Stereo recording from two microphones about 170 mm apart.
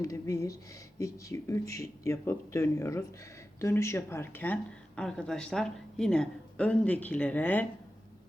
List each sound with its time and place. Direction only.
0.0 s speech: 20° left (ahead or behind)